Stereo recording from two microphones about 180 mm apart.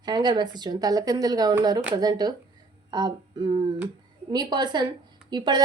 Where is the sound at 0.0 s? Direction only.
25° right (ahead or behind).